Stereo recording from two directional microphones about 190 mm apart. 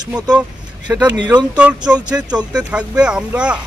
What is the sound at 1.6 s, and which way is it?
Speech, 5° right (ahead or behind).